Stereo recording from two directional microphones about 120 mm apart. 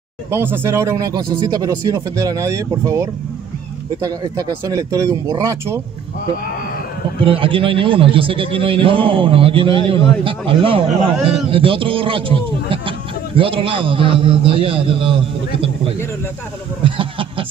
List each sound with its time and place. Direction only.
0.3 s speech: 20° right (ahead or behind)
7.2 s a man's voice: 45° right (ahead or behind)
16.8 s a sound: 45° right (ahead or behind)